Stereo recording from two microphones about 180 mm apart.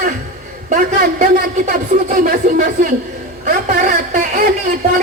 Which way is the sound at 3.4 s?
50° right (ahead or behind).